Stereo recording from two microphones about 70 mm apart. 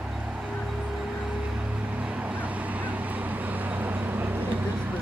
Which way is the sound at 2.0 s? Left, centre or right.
Centre.